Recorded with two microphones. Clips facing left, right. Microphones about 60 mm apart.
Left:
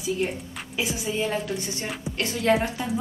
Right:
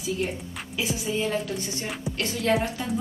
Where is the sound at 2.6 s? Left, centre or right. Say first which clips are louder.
Left 1 dB; centre.